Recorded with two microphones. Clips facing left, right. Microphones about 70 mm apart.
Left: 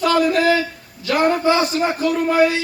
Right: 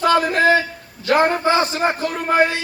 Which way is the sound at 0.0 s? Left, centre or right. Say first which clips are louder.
Even; right.